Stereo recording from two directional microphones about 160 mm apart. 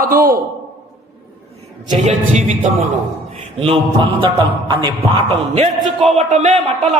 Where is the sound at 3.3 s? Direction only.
35° right (ahead or behind).